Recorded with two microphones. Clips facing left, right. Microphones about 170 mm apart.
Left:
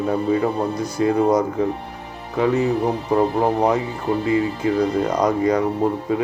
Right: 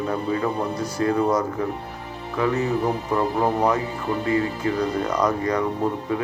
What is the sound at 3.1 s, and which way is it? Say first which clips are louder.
Speech: left 4 dB; 25° left (ahead or behind).